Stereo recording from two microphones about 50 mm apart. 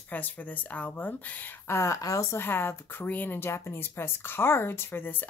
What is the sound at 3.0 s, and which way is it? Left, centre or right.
Speech, left.